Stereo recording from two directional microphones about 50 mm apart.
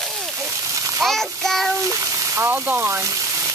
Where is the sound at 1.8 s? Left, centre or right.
Right.